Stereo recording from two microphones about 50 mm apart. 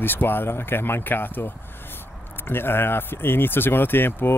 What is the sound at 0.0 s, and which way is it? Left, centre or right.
Speech, left.